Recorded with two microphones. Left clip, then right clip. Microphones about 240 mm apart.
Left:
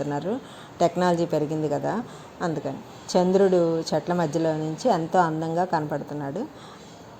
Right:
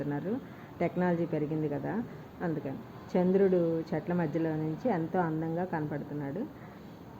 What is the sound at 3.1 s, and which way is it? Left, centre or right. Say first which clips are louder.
A woman's voice: left 7 dB; centre.